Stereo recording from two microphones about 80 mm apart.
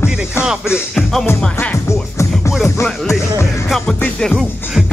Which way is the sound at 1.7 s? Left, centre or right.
Left.